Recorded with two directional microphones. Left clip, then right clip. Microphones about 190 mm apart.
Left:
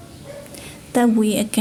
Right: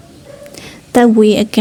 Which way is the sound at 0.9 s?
30° right (ahead or behind).